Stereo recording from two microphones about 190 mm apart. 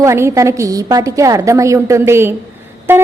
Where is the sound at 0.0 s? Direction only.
15° right (ahead or behind).